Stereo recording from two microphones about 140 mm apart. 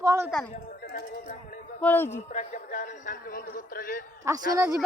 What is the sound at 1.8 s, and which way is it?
Speech, 15° left (ahead or behind).